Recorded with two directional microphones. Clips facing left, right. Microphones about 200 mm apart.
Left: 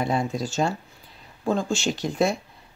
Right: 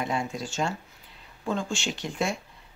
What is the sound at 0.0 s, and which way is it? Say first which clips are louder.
Speech: left 5 dB; 35° left (ahead or behind).